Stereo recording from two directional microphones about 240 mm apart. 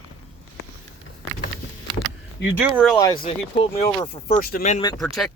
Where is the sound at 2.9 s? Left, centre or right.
Centre.